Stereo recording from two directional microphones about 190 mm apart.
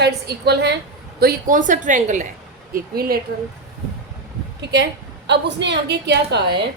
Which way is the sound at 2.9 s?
50° right (ahead or behind).